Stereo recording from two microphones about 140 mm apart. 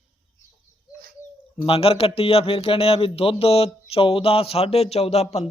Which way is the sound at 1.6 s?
45° left (ahead or behind).